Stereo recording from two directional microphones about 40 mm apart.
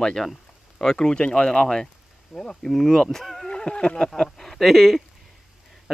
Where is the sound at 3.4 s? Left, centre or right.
Left.